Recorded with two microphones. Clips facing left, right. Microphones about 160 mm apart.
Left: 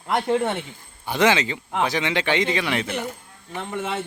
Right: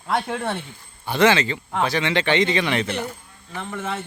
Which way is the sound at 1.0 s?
15° left (ahead or behind).